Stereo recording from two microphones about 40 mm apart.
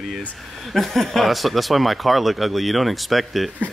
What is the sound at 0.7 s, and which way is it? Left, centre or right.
Speech, centre.